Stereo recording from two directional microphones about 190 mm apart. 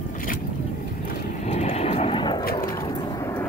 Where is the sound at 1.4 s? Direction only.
35° left (ahead or behind); by 3.5 s 15° left (ahead or behind).